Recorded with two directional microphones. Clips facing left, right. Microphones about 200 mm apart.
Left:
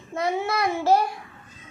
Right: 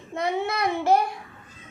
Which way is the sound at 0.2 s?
20° right (ahead or behind).